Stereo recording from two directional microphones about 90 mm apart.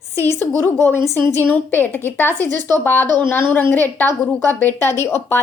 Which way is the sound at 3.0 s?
55° right (ahead or behind).